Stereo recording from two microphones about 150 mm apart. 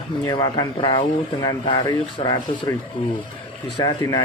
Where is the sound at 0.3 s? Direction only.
30° left (ahead or behind).